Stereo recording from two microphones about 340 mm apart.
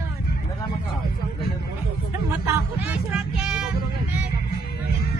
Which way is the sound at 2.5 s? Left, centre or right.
Centre.